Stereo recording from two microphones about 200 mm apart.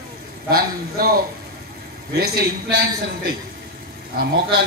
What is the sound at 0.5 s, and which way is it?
Speech, 50° right (ahead or behind).